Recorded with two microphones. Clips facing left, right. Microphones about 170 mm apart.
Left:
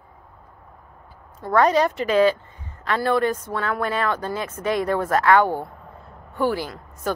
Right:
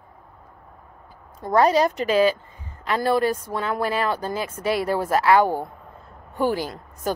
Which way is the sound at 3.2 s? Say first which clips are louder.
Even; 10° right (ahead or behind).